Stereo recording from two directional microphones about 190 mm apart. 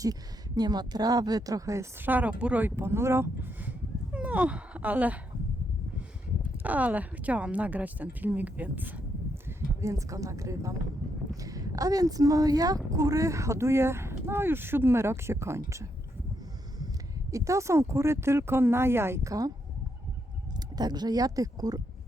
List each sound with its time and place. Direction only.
0.0 s speech: 20° right (ahead or behind)
3.7 s a sound: 10° right (ahead or behind)
6.6 s speech: 10° right (ahead or behind)
17.3 s speech: 15° right (ahead or behind)
20.7 s speech: 20° right (ahead or behind)